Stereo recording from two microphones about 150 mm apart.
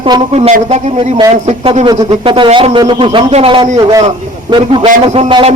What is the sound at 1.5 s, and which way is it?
A man's voice, 45° right (ahead or behind).